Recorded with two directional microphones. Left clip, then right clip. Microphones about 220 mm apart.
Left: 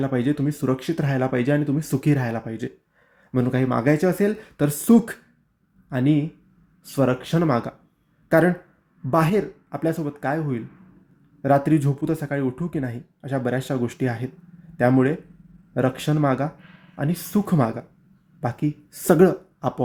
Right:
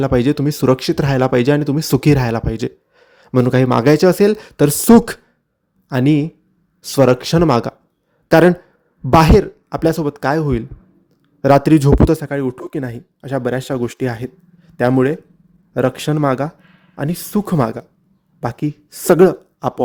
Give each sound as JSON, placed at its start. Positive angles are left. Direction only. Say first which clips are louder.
{"t": 0.0, "sound": "a man's voice", "louder": "right 8 dB", "side_deg": -40}